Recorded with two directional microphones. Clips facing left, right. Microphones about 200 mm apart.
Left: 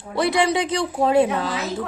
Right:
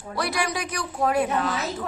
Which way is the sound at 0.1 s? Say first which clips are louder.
Left 8 dB; 25° left (ahead or behind).